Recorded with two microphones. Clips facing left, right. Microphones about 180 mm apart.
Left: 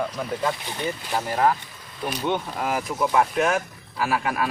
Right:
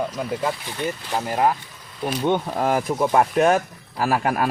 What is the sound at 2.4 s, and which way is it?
Speech, 40° right (ahead or behind).